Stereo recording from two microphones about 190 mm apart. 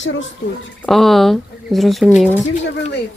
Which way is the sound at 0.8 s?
Centre (ahead or behind).